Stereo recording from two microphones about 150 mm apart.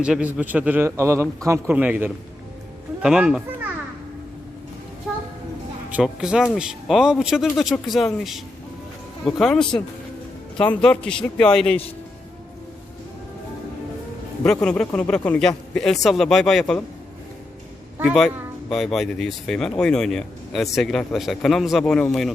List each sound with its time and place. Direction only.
0.0 s a man's voice: 5° right (ahead or behind)
5.9 s speech: 5° right (ahead or behind)
14.4 s speech: 5° left (ahead or behind)
18.0 s speech: centre (ahead or behind)